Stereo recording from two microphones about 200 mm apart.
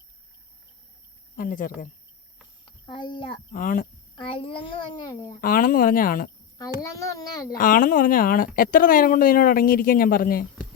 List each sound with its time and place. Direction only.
1.4 s speech: 45° left (ahead or behind)
2.6 s a child's voice: 25° left (ahead or behind)
3.5 s speech: 40° left (ahead or behind)
4.1 s a child's voice: 25° left (ahead or behind)
5.4 s speech: 45° left (ahead or behind)
6.9 s a child's voice: 15° left (ahead or behind)
7.6 s speech: 45° left (ahead or behind)